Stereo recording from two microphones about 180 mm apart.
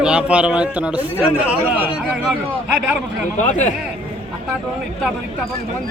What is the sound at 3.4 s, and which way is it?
Speech, 40° left (ahead or behind).